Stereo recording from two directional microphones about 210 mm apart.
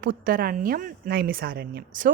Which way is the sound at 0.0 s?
40° right (ahead or behind).